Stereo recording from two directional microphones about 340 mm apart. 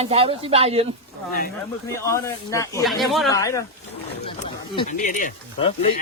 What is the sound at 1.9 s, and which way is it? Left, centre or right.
Speech, centre.